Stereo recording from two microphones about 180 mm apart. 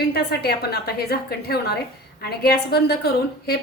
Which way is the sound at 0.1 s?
60° left (ahead or behind).